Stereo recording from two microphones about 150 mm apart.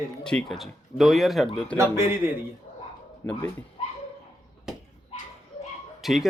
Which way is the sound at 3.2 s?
15° left (ahead or behind).